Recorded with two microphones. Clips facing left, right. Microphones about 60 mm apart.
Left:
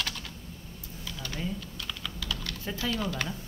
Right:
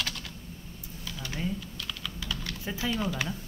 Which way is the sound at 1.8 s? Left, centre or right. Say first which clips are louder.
Even; centre.